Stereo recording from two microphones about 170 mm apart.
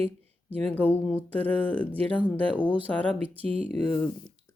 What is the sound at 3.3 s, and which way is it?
Speech, 35° right (ahead or behind).